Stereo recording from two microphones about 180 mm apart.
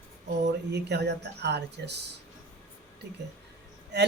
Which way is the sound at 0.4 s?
70° right (ahead or behind).